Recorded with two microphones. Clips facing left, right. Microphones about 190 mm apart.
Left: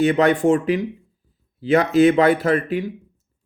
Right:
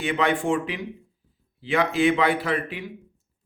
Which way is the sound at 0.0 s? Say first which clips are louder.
Left 8 dB; 40° left (ahead or behind).